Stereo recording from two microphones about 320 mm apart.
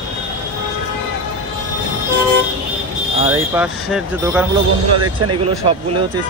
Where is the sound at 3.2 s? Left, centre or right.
Centre.